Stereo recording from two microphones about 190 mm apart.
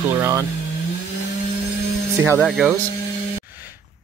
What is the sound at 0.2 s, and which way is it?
Speech, 15° right (ahead or behind).